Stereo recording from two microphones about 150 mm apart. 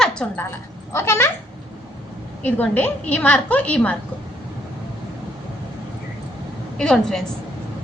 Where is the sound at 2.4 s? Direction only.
10° left (ahead or behind).